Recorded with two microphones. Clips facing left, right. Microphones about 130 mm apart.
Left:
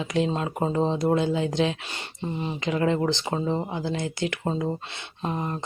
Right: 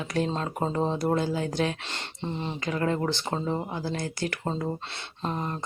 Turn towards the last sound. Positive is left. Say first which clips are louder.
# left 2 dB
turn(degrees=15)  # may be behind; listen again after turning